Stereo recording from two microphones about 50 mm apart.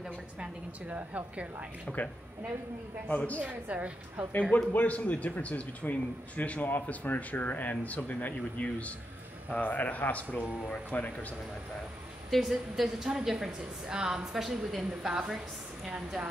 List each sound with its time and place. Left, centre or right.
0.8 s a woman's voice: right
1.9 s speech: centre
3.1 s speech: left
3.3 s a woman's voice: right
4.3 s speech: left
12.3 s a woman's voice: centre